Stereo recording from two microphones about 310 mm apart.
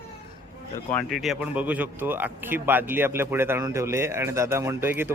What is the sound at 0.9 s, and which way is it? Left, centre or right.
A man's voice, centre.